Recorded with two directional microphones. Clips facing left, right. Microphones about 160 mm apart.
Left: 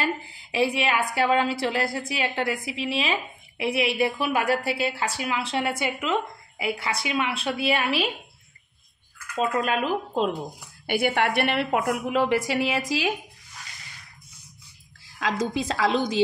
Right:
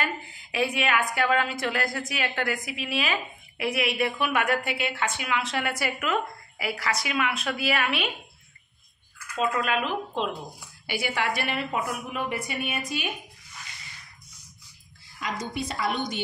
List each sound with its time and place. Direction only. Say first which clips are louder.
0.0 s a woman's voice: left 3 dB; 30° left (ahead or behind)
9.4 s speech: left 2 dB; 35° left (ahead or behind)
10.9 s a woman's voice: left 5 dB; 55° left (ahead or behind); by 13.1 s 90° left
15.2 s a woman's voice: left 6 dB; 90° left